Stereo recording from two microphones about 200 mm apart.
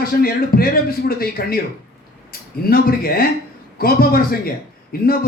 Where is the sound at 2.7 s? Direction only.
50° left (ahead or behind).